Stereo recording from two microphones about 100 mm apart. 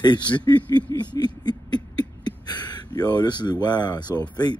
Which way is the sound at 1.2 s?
45° left (ahead or behind).